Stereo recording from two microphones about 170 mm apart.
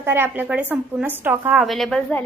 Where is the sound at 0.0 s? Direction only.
15° right (ahead or behind).